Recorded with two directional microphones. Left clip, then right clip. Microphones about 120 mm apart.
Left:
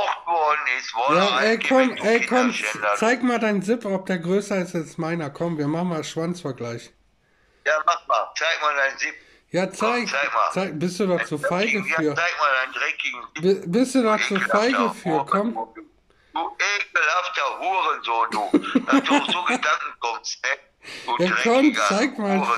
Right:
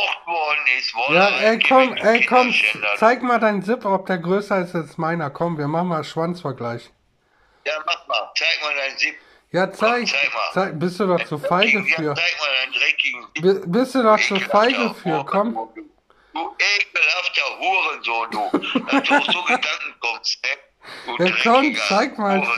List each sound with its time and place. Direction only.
0.0 s a man's voice: 10° right (ahead or behind)
3.0 s speech: 20° left (ahead or behind)
7.6 s speech: 15° right (ahead or behind)
9.5 s speech: 20° left (ahead or behind)
9.8 s speech: 20° right (ahead or behind)
10.5 s speech: 20° left (ahead or behind)
11.6 s speech: 20° right (ahead or behind)
13.5 s speech: 20° left (ahead or behind)
14.1 s speech: 20° right (ahead or behind)
21.9 s speech: 20° left (ahead or behind)